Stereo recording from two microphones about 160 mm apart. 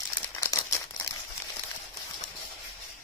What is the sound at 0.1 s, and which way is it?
Crumpling, 15° left (ahead or behind).